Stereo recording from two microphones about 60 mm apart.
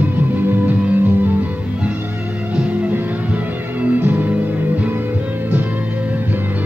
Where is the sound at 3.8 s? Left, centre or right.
Right.